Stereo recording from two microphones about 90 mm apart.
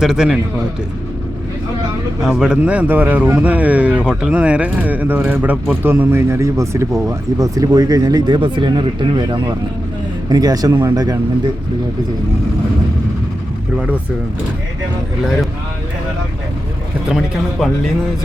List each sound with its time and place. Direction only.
0.0 s a man's voice: 5° right (ahead or behind)
2.2 s a man's voice: 5° right (ahead or behind); by 9.6 s 60° right (ahead or behind)
10.2 s speech: 45° right (ahead or behind)
17.1 s a man's voice: centre (ahead or behind)